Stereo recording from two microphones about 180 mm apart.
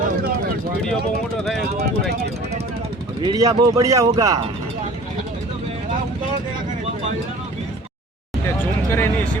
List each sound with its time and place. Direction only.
3.2 s speech: 25° right (ahead or behind)
8.5 s speech: 10° left (ahead or behind)